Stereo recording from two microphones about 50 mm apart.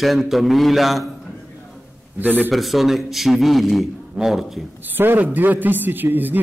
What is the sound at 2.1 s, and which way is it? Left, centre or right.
Speech, right.